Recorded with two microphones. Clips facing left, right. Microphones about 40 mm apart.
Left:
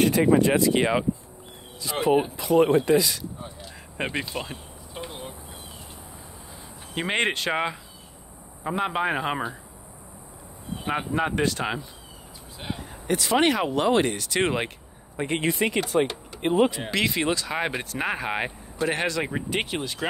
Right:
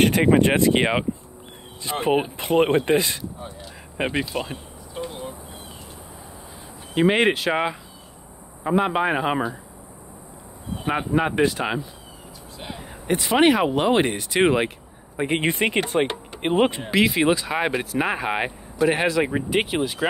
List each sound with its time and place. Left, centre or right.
0.0 s speech: right
4.0 s speech: centre
4.9 s a sound: centre
7.0 s speech: centre
10.8 s speech: centre
13.0 s speech: right
13.4 s speech: centre
15.4 s speech: right
16.9 s speech: centre